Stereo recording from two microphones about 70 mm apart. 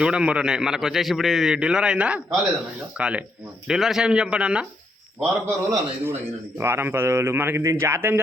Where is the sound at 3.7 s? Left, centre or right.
Centre.